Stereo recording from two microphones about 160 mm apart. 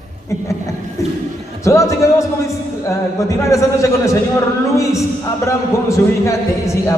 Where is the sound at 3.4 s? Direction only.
20° left (ahead or behind).